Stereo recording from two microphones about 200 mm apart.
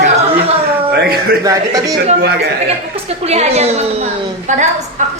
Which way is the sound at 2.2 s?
55° right (ahead or behind).